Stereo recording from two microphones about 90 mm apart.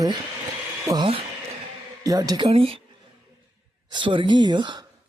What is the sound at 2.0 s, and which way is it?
Speech, 45° right (ahead or behind).